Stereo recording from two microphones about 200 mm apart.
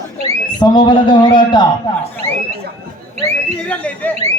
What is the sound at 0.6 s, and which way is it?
A man's voice, 25° left (ahead or behind).